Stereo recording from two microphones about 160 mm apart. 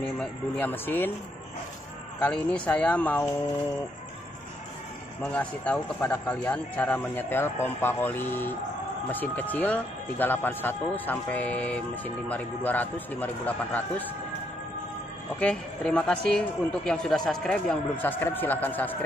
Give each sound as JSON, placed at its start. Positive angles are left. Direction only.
{"t": 0.0, "sound": "speech", "side_deg": 5}
{"t": 2.1, "sound": "speech", "side_deg": 10}
{"t": 5.2, "sound": "speech", "side_deg": 10}
{"t": 15.3, "sound": "speech", "side_deg": 5}